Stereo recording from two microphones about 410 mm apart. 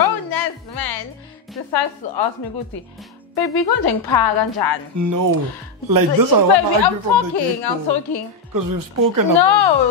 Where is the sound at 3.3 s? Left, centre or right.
Left.